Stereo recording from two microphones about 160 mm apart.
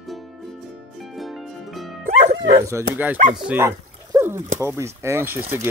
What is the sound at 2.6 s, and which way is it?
Speech, 15° right (ahead or behind).